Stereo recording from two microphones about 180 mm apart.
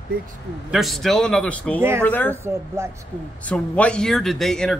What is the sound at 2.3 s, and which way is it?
Speech, 15° right (ahead or behind).